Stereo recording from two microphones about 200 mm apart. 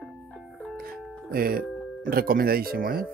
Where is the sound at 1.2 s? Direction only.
45° right (ahead or behind).